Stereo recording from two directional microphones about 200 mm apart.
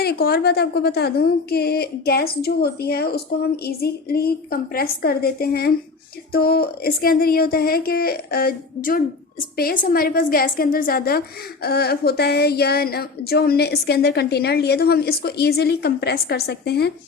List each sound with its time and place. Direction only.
0.0 s a woman's voice: 50° left (ahead or behind)